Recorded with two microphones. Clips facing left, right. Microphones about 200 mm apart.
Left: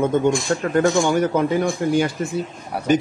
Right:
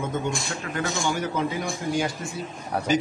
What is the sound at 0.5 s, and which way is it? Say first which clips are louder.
A man's voice: left 12 dB; 50° left (ahead or behind).